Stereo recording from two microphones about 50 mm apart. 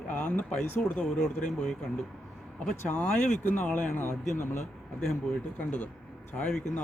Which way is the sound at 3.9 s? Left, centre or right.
Left.